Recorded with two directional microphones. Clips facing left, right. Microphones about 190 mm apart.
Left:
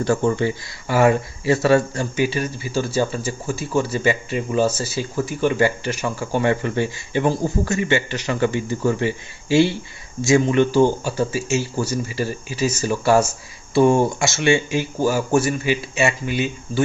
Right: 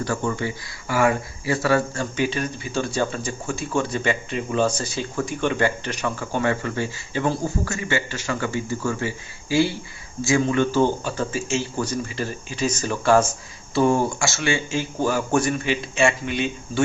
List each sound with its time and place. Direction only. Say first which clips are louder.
0.0 s speech: left 6 dB; 25° left (ahead or behind); by 6.4 s 10° left (ahead or behind)
6.4 s speech: left 3 dB; 20° left (ahead or behind); by 16.8 s 5° left (ahead or behind)